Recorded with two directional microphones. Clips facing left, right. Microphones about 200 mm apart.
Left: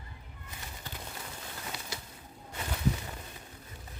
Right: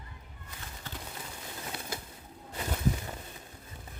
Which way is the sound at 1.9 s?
55° right (ahead or behind).